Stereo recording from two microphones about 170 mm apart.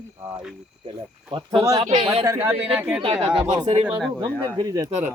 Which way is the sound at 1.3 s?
30° right (ahead or behind).